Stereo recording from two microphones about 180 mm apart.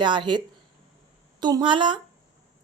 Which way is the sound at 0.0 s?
25° right (ahead or behind).